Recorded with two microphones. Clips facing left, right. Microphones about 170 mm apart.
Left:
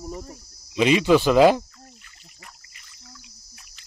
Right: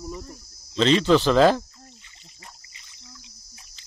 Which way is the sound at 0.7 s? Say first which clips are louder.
Left 1 dB; 10° left (ahead or behind).